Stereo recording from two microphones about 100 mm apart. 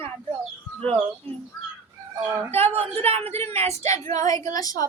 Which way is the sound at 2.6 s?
90° right.